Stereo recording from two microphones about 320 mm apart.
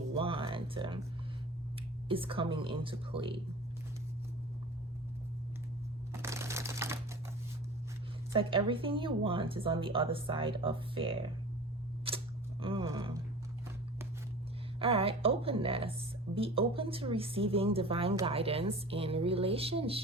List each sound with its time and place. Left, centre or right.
0.2 s speech: centre
2.0 s speech: centre
6.1 s typewriter: centre
8.3 s speech: centre
12.0 s a sound: centre
14.8 s speech: centre